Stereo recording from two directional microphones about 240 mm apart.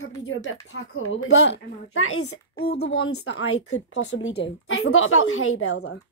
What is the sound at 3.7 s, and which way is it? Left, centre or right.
A woman's voice, left.